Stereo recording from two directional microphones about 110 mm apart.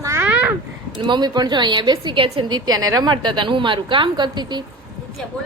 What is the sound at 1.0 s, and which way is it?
A woman's voice, 40° right (ahead or behind).